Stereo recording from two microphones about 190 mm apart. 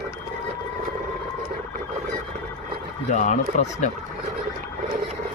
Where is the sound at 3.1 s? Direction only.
35° left (ahead or behind).